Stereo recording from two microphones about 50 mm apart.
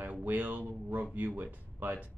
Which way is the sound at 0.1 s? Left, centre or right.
Right.